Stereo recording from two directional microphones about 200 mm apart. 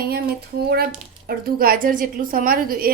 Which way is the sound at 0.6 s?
50° right (ahead or behind).